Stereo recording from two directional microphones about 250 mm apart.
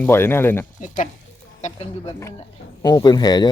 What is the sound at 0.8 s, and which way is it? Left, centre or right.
Speech, left.